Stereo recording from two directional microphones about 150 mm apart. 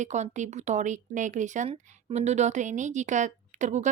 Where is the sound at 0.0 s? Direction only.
50° right (ahead or behind).